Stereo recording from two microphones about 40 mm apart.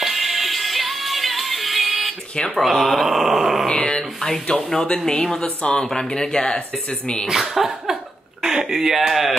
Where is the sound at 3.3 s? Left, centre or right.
Centre.